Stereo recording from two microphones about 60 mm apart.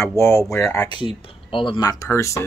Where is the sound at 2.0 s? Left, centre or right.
Left.